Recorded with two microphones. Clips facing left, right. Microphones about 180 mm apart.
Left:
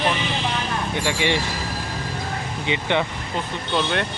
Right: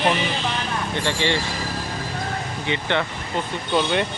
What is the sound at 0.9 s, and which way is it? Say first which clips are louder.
Speech: even; 10° left (ahead or behind).